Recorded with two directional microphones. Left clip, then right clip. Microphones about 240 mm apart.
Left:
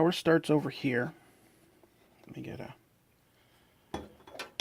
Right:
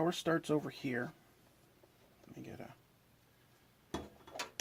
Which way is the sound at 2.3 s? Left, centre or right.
Left.